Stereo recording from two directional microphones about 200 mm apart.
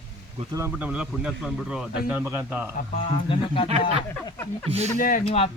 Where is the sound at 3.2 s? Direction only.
25° left (ahead or behind).